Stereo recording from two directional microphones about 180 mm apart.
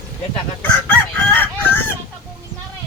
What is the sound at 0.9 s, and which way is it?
Chicken, 10° left (ahead or behind).